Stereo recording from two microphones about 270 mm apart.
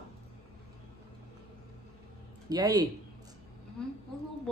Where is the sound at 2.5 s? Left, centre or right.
Centre.